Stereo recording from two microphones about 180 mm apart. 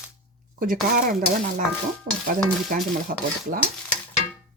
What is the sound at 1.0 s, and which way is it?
Speech, 55° right (ahead or behind).